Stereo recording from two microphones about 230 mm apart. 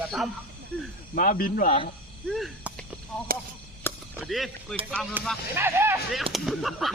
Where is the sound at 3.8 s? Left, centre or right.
Centre.